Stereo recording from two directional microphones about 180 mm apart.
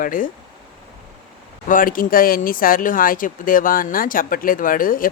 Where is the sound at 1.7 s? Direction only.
50° left (ahead or behind).